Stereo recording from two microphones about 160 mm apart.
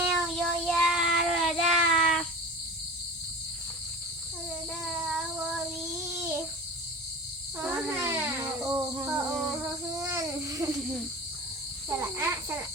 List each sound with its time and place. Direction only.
0.3 s child singing: centre (ahead or behind)
4.9 s child singing: 10° right (ahead or behind)
7.6 s a sound: 15° right (ahead or behind)
10.0 s babbling: 20° right (ahead or behind)
11.9 s cricket: 15° right (ahead or behind)